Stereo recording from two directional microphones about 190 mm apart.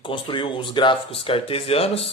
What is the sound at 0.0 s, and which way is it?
A man's voice, 25° left (ahead or behind).